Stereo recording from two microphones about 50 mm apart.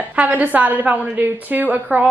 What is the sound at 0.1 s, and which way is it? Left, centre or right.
A woman's voice, right.